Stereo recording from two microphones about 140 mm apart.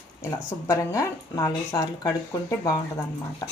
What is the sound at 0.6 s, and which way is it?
Speech, 20° left (ahead or behind).